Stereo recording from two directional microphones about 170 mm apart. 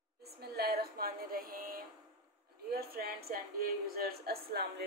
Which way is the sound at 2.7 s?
65° right (ahead or behind).